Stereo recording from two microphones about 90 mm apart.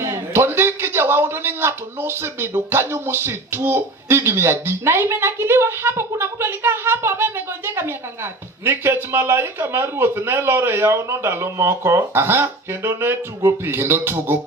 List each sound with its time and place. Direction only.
0.0 s a man's voice: 30° right (ahead or behind)